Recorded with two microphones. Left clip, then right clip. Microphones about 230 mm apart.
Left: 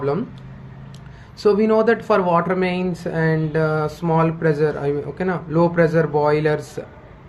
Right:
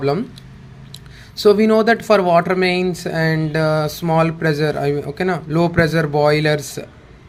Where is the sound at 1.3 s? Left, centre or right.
Right.